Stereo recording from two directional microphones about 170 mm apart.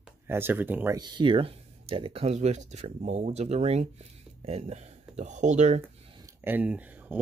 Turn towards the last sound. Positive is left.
turn(degrees=-10)  # may be behind; listen again after turning